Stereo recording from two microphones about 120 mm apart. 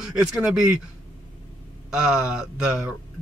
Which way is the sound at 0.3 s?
5° right (ahead or behind).